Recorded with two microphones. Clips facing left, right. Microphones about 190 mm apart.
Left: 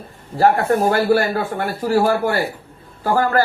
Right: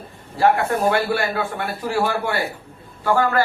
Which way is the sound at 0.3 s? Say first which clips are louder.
Left 3 dB; 40° left (ahead or behind).